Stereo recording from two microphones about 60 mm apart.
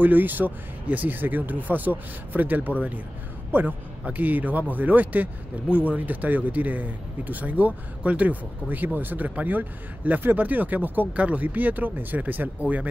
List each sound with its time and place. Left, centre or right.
0.0 s speech: right